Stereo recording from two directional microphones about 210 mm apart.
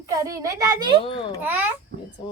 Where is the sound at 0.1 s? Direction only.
15° right (ahead or behind).